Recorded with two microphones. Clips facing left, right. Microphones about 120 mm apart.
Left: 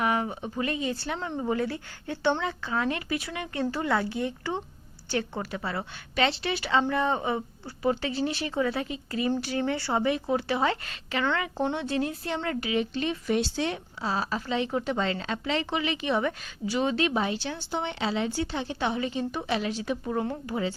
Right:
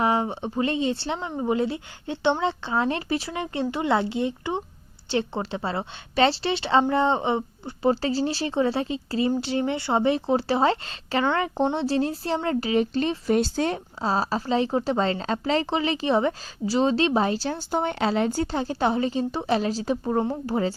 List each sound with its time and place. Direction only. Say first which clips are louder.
0.0 s speech: right 4 dB; 30° right (ahead or behind)